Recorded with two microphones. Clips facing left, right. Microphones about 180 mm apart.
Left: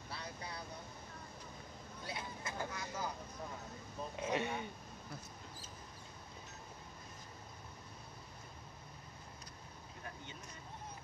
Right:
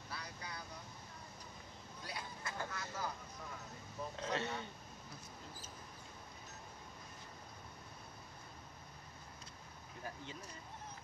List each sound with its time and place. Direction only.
0.1 s vehicle: 30° left (ahead or behind)
2.0 s vehicle: 20° left (ahead or behind)
4.2 s a sound: 15° left (ahead or behind)